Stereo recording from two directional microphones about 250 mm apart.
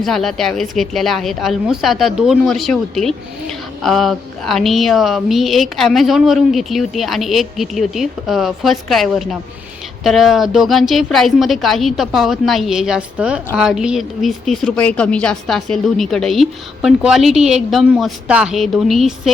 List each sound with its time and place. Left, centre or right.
0.0 s a woman's voice: centre